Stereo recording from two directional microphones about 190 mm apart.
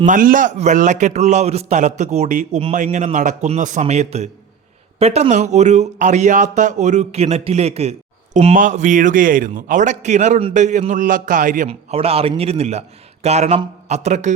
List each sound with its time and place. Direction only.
0.0 s speech: 45° right (ahead or behind)
11.7 s speech: 30° right (ahead or behind)